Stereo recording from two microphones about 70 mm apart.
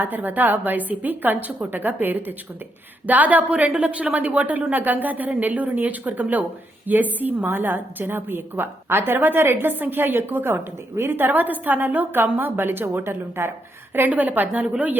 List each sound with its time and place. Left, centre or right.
0.0 s a woman's voice: right